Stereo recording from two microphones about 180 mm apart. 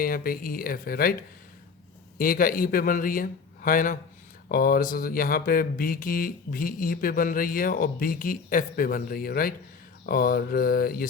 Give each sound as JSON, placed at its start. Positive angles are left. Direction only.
{"t": 0.0, "sound": "speech", "side_deg": 55}
{"t": 2.1, "sound": "mantra", "side_deg": 55}
{"t": 10.1, "sound": "speech", "side_deg": 55}